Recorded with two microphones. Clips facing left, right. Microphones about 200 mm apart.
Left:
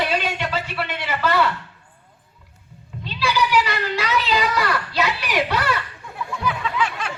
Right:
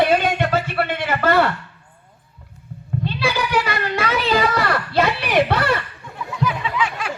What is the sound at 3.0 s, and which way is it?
A child's voice, 55° right (ahead or behind).